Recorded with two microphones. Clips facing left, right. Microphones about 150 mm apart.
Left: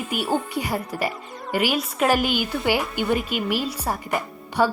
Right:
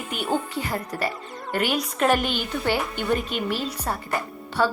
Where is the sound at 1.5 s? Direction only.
5° left (ahead or behind).